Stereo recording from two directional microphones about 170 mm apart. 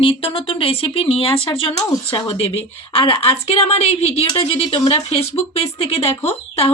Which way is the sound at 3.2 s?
35° left (ahead or behind).